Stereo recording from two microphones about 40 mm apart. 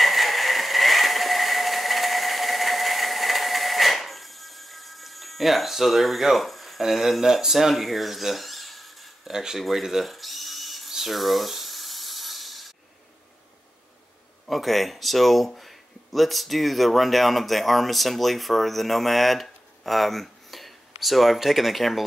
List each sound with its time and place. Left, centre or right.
0.0 s vehicle: centre
6.8 s speech: centre
9.3 s speech: centre
10.1 s ratchet: centre
10.9 s a sound: centre
14.5 s speech: centre